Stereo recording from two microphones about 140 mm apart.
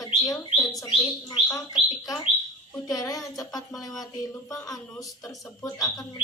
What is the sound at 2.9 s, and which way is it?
A woman's voice, 25° left (ahead or behind).